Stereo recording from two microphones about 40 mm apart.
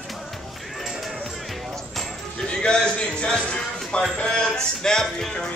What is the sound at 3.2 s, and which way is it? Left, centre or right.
Music, left.